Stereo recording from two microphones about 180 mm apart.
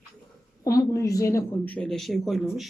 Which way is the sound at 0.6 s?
20° left (ahead or behind).